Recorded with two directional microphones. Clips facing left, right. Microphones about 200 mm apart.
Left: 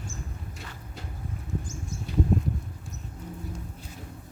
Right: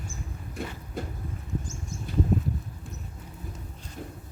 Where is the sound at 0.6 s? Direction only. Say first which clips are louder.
Right 14 dB; 55° right (ahead or behind).